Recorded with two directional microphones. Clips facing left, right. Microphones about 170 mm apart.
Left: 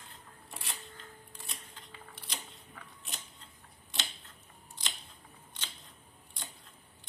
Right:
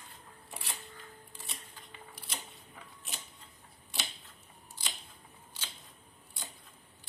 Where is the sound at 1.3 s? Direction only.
Centre (ahead or behind).